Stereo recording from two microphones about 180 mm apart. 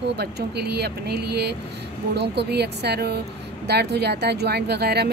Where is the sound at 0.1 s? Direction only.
65° right (ahead or behind).